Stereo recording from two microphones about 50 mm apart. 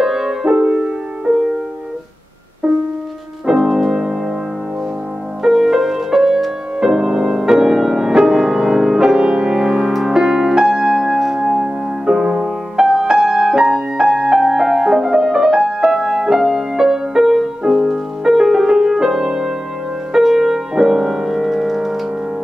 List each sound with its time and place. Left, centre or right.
0.0 s music: centre
3.4 s music: centre
5.4 s music: centre